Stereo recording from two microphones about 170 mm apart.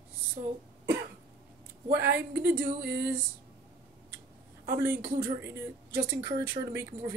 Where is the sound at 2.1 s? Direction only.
10° right (ahead or behind).